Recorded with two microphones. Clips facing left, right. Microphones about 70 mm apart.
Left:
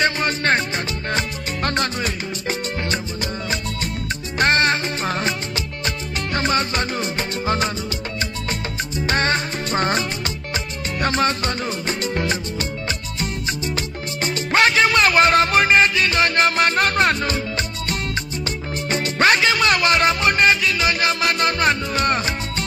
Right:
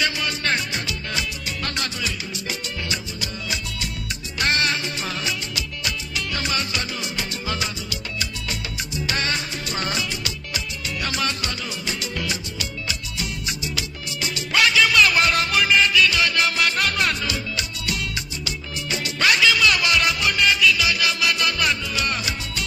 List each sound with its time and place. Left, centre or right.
0.0 s music: left
4.4 s music: left
9.0 s music: left